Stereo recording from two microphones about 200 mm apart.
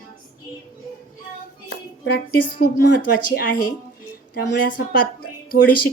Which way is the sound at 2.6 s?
45° left (ahead or behind).